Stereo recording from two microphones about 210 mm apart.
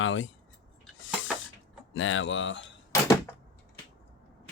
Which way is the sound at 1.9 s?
70° left (ahead or behind).